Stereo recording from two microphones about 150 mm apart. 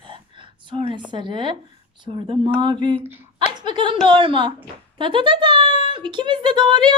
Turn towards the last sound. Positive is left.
turn(degrees=-30)  # may be behind; listen again after turning